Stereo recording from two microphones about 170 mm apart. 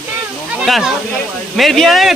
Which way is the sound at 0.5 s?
Centre (ahead or behind).